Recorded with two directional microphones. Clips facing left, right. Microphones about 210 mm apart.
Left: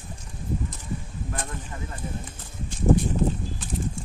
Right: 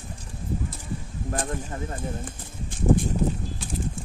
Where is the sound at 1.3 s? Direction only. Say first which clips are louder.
Right 7 dB; 35° right (ahead or behind).